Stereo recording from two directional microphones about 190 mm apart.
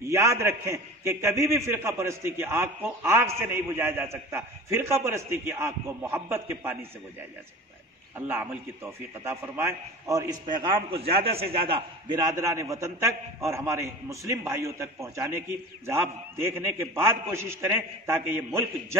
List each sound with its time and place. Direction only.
0.0 s a man's voice: 15° right (ahead or behind)
8.3 s a man's voice: 10° right (ahead or behind)
16.4 s a man's voice: 10° right (ahead or behind)